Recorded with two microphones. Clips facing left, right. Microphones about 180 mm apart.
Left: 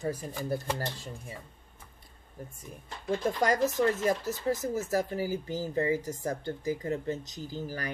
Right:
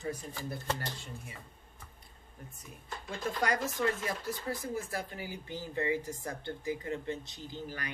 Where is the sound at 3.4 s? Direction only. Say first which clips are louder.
Left 4 dB; 40° left (ahead or behind).